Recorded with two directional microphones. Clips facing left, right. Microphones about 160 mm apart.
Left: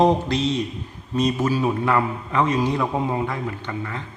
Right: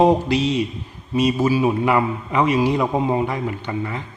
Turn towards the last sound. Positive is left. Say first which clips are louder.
# right 4 dB
turn(degrees=-10)  # may be behind; listen again after turning